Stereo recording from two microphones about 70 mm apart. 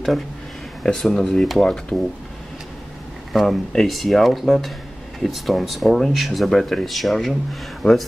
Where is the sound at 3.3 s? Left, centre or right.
Centre.